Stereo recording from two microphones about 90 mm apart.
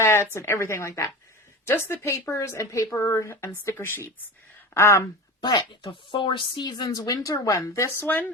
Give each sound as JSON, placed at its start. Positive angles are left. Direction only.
{"t": 0.0, "sound": "a woman's voice", "side_deg": 25}
{"t": 5.4, "sound": "a woman's voice", "side_deg": 50}
{"t": 5.9, "sound": "a woman's voice", "side_deg": 65}
{"t": 8.0, "sound": "speech", "side_deg": 20}